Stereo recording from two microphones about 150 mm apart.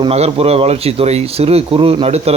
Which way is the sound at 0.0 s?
40° right (ahead or behind).